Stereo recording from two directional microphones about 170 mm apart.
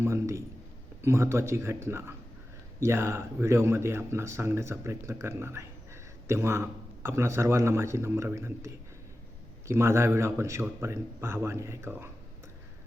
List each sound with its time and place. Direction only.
0.0 s speech: 15° right (ahead or behind)